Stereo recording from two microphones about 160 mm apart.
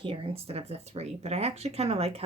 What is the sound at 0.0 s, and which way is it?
Speech, 35° right (ahead or behind).